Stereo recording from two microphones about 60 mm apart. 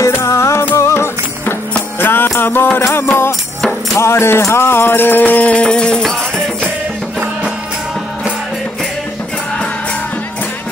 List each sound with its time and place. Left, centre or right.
0.2 s music: left
2.8 s music: left; by 6.7 s centre